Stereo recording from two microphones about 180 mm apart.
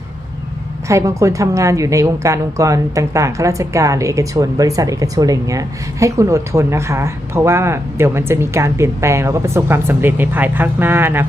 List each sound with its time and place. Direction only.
0.9 s a woman's voice: 15° right (ahead or behind)